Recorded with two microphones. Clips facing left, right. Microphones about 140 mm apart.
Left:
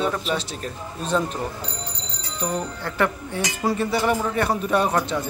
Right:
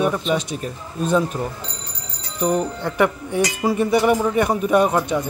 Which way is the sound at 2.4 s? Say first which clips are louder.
Right 7 dB; 15° right (ahead or behind).